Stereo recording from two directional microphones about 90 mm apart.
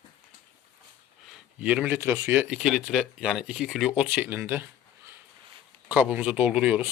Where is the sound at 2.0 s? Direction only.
30° right (ahead or behind).